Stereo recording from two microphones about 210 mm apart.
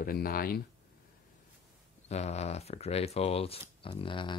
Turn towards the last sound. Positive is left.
turn(degrees=25)  # may be behind; listen again after turning